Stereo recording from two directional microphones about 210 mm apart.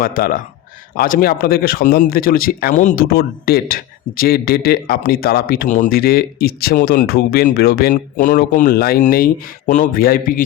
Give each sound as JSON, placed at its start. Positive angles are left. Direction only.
{"t": 0.0, "sound": "speech", "side_deg": 45}